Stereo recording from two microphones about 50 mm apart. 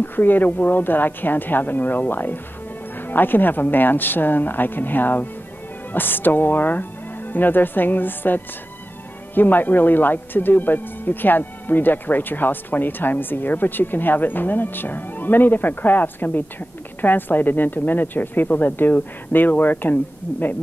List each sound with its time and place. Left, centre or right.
0.0 s speech: left